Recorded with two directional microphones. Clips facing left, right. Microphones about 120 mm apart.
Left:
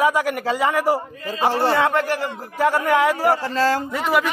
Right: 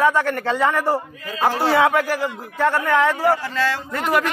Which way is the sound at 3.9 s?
Centre (ahead or behind).